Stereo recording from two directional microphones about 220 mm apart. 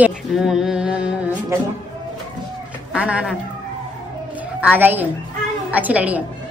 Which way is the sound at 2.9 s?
5° right (ahead or behind).